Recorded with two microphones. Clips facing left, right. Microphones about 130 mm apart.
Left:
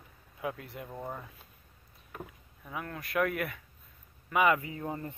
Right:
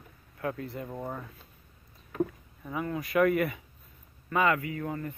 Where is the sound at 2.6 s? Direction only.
5° right (ahead or behind).